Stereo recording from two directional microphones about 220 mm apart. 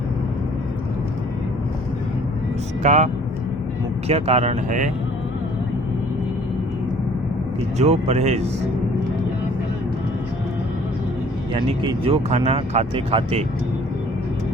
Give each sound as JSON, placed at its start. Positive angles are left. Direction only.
{"t": 2.8, "sound": "speech", "side_deg": -30}
{"t": 4.1, "sound": "speech", "side_deg": -30}
{"t": 7.8, "sound": "speech", "side_deg": -30}
{"t": 11.5, "sound": "speech", "side_deg": -20}